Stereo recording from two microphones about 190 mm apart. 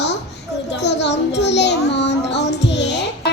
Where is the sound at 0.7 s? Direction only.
65° left (ahead or behind).